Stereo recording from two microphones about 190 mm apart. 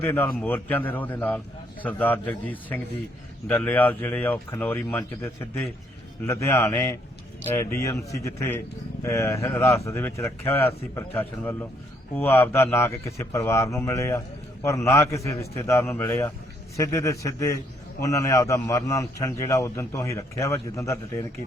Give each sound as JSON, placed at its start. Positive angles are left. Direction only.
{"t": 0.0, "sound": "a man's voice", "side_deg": 10}